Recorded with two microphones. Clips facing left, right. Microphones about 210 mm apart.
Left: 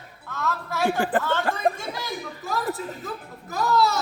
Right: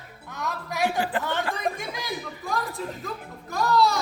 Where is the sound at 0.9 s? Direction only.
50° left (ahead or behind).